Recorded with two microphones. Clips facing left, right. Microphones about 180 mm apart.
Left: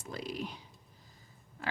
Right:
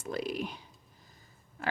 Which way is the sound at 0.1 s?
60° right (ahead or behind).